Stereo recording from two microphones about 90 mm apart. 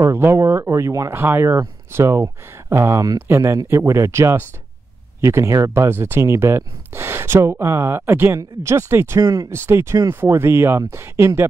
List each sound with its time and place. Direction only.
0.0 s speech: 30° right (ahead or behind)
1.1 s speech: 25° right (ahead or behind)